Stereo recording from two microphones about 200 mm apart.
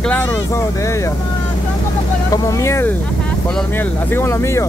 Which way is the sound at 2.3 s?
15° left (ahead or behind).